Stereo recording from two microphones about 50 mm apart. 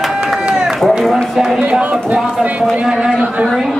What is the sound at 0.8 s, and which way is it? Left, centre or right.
Run, centre.